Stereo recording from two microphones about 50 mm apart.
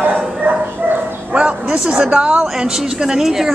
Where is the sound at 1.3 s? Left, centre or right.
Right.